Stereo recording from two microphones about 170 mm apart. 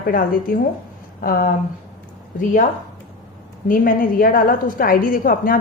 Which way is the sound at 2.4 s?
50° left (ahead or behind).